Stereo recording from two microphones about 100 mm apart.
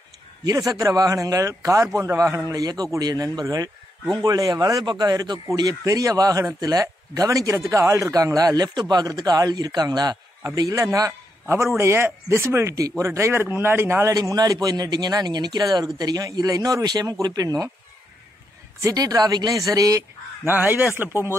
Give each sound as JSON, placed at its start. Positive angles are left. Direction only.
{"t": 0.4, "sound": "a man's voice", "side_deg": -40}
{"t": 14.1, "sound": "speech", "side_deg": -40}
{"t": 18.8, "sound": "speech", "side_deg": -35}
{"t": 20.4, "sound": "speech", "side_deg": -20}